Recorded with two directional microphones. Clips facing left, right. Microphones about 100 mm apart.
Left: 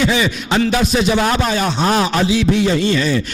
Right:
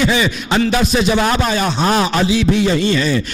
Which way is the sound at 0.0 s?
15° right (ahead or behind).